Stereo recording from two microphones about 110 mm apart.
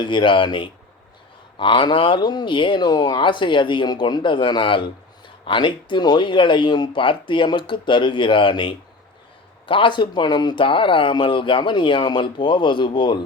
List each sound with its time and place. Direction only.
0.0 s speech: 45° left (ahead or behind)